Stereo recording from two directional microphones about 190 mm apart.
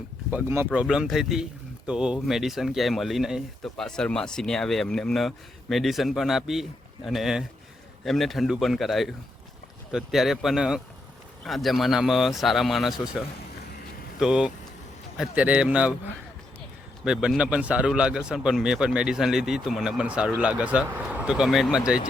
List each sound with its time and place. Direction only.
0.3 s a man's voice: 10° right (ahead or behind)
17.0 s speech: 5° right (ahead or behind)